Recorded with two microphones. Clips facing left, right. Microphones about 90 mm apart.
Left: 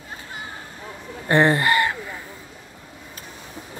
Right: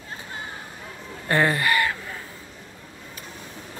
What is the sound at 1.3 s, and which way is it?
Speech, 25° left (ahead or behind).